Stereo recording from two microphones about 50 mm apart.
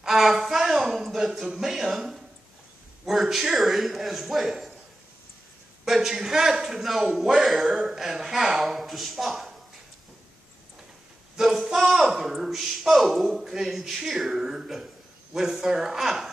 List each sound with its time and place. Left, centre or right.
0.0 s a sound: centre
1.4 s speech: centre
5.9 s a man's voice: centre
11.3 s a man's voice: centre